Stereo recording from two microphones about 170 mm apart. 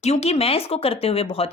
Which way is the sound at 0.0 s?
40° left (ahead or behind).